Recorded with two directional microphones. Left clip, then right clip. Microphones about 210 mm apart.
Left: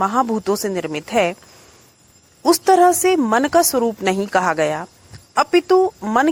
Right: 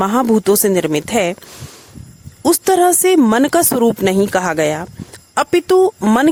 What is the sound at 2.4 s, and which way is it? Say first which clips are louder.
Speech: even; 35° right (ahead or behind).